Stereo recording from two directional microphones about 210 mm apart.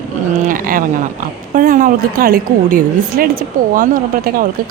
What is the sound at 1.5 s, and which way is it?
A woman's voice, 40° right (ahead or behind).